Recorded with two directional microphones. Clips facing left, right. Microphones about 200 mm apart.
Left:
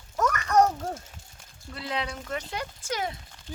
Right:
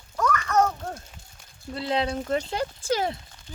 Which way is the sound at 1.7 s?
30° right (ahead or behind).